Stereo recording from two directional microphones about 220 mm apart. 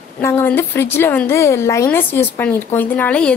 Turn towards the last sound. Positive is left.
turn(degrees=5)  # may be behind; listen again after turning